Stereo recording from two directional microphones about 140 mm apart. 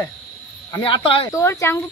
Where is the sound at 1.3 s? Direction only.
20° left (ahead or behind).